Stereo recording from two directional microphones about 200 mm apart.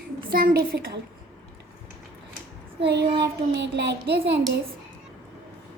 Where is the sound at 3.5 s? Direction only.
60° right (ahead or behind).